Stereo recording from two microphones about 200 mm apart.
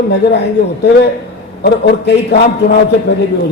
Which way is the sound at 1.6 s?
55° left (ahead or behind).